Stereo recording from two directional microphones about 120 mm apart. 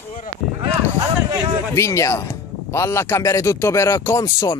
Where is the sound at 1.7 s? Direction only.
25° left (ahead or behind).